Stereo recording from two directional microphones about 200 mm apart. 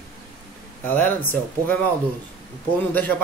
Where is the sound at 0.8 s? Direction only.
10° left (ahead or behind).